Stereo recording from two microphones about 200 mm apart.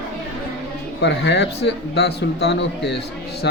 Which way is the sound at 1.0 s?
60° left (ahead or behind).